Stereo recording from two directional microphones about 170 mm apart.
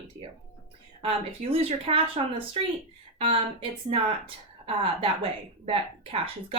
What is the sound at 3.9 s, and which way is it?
Speech, 30° right (ahead or behind).